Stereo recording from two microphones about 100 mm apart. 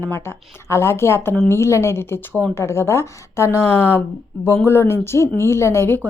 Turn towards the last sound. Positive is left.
turn(degrees=25)  # may be behind; listen again after turning